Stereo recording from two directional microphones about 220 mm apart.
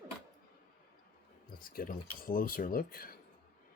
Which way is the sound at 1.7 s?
40° left (ahead or behind).